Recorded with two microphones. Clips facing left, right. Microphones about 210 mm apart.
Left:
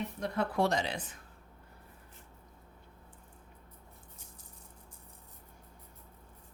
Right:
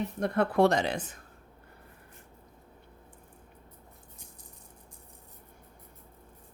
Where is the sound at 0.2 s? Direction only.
60° right (ahead or behind).